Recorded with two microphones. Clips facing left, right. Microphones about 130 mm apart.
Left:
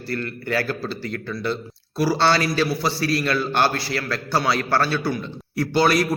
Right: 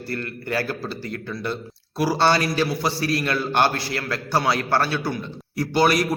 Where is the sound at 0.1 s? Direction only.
25° right (ahead or behind).